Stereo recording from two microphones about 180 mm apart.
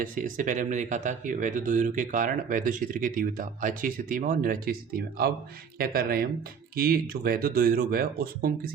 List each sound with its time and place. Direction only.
0.0 s speech: 50° right (ahead or behind)